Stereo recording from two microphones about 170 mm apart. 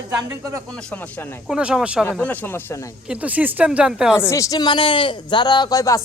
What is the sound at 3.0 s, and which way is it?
Speech, 10° right (ahead or behind).